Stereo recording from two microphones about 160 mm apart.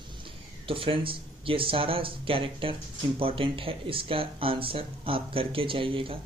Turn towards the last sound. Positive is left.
turn(degrees=-35)  # may be behind; listen again after turning